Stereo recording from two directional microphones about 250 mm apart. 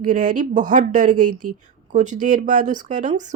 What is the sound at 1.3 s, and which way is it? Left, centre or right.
Speech, right.